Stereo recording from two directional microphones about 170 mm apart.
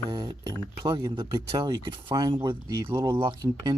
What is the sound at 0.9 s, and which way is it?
Speech, 30° right (ahead or behind).